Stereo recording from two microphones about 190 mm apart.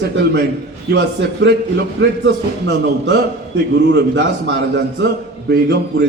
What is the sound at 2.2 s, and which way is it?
A man's voice, 65° right (ahead or behind).